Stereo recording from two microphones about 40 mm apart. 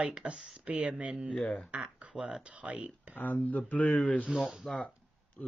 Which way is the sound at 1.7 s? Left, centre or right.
Right.